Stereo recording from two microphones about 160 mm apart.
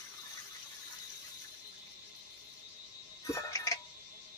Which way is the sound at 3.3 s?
20° left (ahead or behind).